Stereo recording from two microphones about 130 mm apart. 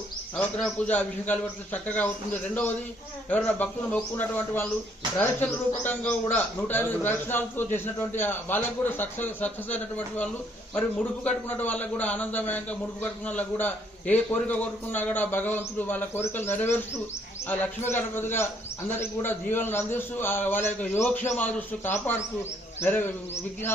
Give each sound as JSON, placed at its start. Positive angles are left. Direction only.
{"t": 0.3, "sound": "a man's voice", "side_deg": 10}
{"t": 3.2, "sound": "a man's voice", "side_deg": 10}